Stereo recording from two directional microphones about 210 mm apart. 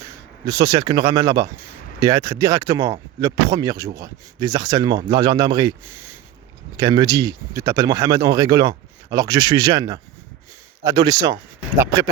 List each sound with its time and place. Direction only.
0.4 s speech: 20° right (ahead or behind)
6.7 s speech: 15° right (ahead or behind)